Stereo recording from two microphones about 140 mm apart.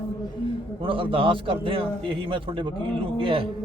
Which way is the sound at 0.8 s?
40° right (ahead or behind).